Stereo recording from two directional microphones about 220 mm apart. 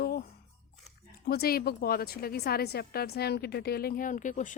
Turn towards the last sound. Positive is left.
turn(degrees=35)  # may be behind; listen again after turning